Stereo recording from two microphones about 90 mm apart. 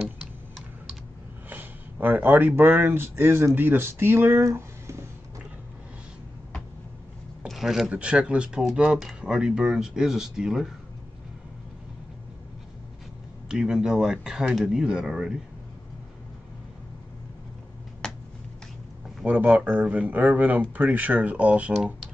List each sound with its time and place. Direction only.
0.0 s typing: centre (ahead or behind)
1.5 s speech: 20° right (ahead or behind)
7.4 s a sound: centre (ahead or behind)
7.9 s speech: 10° right (ahead or behind)
13.5 s speech: 10° right (ahead or behind)
18.0 s a sound: 10° left (ahead or behind)
19.2 s speech: 15° right (ahead or behind)